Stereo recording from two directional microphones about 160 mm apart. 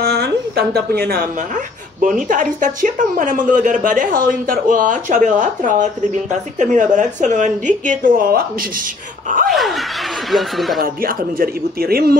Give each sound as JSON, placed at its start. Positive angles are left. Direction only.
{"t": 0.0, "sound": "a sound", "side_deg": -85}
{"t": 2.0, "sound": "a woman's voice", "side_deg": -55}
{"t": 9.5, "sound": "speech", "side_deg": 0}
{"t": 10.8, "sound": "speech", "side_deg": -65}